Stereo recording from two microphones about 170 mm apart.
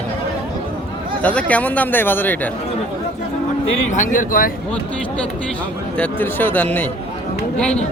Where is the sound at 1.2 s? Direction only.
10° left (ahead or behind).